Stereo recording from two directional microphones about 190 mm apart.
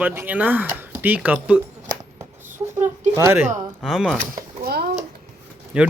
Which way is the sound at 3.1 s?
15° right (ahead or behind).